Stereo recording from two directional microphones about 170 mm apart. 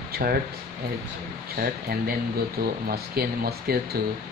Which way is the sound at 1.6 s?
60° right (ahead or behind).